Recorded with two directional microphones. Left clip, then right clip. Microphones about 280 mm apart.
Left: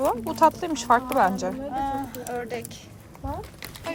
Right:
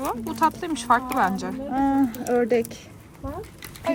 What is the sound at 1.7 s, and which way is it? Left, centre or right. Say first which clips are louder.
Speech: right 5 dB; right.